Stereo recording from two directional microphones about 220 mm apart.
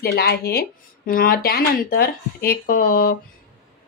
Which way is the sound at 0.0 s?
45° left (ahead or behind).